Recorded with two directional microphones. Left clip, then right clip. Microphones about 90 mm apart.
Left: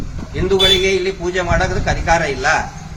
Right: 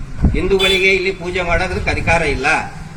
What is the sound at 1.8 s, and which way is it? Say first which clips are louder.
Speech: right 1 dB; 45° left (ahead or behind).